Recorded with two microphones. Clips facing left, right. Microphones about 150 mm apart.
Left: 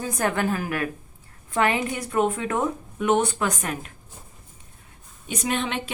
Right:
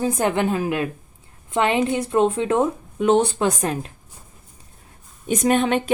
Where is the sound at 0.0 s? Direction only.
20° right (ahead or behind).